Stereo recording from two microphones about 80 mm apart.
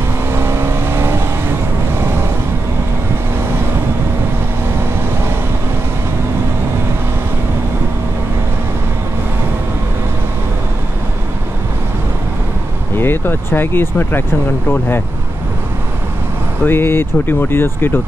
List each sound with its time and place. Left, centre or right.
0.3 s vehicle: right
12.9 s speech: left
16.6 s speech: left